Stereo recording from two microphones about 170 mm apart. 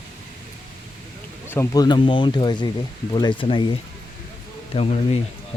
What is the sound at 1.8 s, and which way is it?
Speech, 25° left (ahead or behind).